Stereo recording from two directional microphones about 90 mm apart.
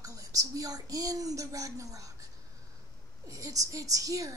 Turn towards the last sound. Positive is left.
turn(degrees=-40)  # may be behind; listen again after turning